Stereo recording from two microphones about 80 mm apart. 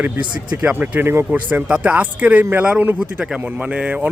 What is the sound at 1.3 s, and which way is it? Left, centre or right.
Speech, centre.